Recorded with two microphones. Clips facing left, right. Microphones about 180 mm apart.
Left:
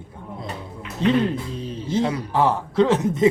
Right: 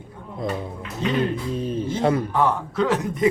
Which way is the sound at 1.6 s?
50° right (ahead or behind).